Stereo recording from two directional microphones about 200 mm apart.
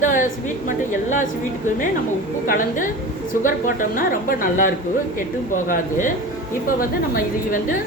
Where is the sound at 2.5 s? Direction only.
40° left (ahead or behind).